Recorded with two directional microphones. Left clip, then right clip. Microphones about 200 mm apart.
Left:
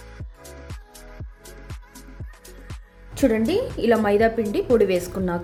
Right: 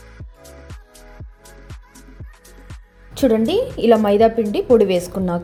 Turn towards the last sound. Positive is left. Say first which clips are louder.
# right 4 dB
turn(degrees=-15)  # may be behind; listen again after turning